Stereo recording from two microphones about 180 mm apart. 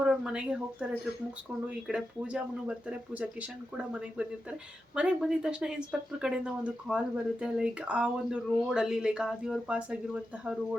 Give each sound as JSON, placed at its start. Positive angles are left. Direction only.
{"t": 0.0, "sound": "speech", "side_deg": -5}
{"t": 4.9, "sound": "speech", "side_deg": -5}